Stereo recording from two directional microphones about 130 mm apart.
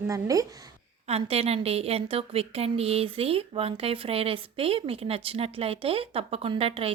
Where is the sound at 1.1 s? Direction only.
50° right (ahead or behind).